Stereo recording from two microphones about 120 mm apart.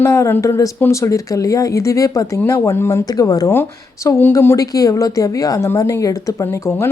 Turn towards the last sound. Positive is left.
turn(degrees=20)  # may be behind; listen again after turning